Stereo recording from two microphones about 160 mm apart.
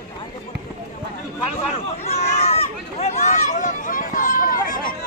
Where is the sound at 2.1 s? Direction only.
40° left (ahead or behind); by 4.7 s 60° left (ahead or behind).